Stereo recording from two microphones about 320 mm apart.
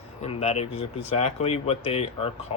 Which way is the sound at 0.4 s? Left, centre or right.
Centre.